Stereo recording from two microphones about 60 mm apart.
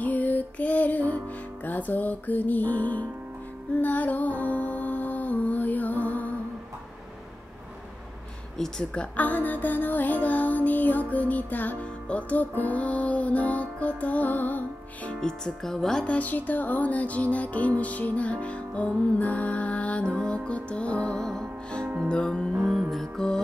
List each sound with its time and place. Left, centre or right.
0.0 s music: left
8.5 s speech: centre; by 14.6 s left
15.1 s speech: centre
21.2 s music: centre
22.8 s music: centre